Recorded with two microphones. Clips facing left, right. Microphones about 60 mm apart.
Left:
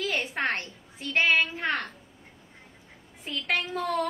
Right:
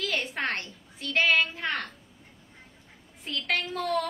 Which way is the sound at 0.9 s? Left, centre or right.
Left.